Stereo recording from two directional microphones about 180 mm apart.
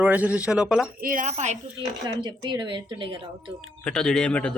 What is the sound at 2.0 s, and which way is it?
Speech, 25° right (ahead or behind).